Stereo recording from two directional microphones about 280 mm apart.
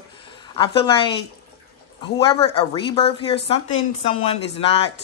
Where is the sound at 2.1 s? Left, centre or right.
Left.